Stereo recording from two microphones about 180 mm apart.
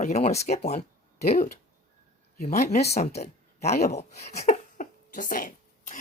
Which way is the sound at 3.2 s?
40° left (ahead or behind).